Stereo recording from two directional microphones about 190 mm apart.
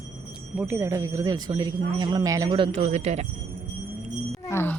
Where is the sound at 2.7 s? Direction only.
35° right (ahead or behind).